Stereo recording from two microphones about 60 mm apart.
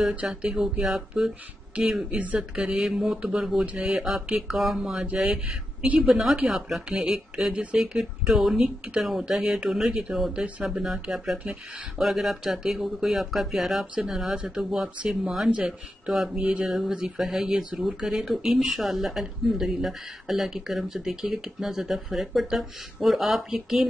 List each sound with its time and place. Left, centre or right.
0.3 s speech: centre
2.0 s speech: right; by 23.9 s centre